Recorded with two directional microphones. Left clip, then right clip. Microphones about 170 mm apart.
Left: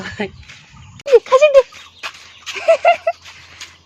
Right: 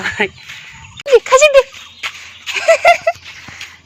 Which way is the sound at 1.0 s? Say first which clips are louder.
Right 2 dB; 5° left (ahead or behind).